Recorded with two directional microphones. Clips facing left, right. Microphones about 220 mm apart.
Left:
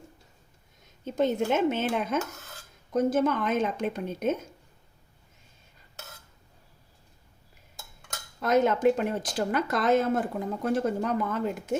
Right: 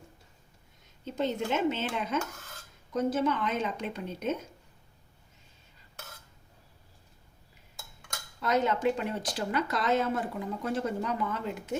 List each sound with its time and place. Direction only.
1.0 s speech: 50° left (ahead or behind)
8.4 s speech: 50° left (ahead or behind)